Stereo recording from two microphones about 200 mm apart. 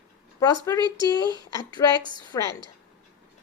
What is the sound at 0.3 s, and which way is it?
Speech, 20° left (ahead or behind).